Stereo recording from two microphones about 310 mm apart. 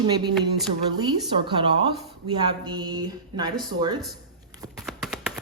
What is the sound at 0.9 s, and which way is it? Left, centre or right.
A woman's voice, centre.